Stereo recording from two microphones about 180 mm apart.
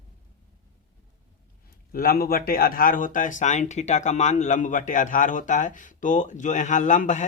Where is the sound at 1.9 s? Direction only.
55° left (ahead or behind).